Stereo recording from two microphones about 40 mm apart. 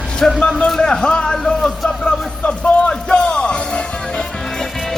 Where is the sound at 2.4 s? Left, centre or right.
Left.